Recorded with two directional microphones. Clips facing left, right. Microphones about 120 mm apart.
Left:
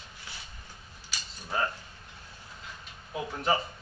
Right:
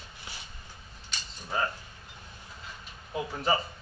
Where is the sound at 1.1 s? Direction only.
Centre (ahead or behind).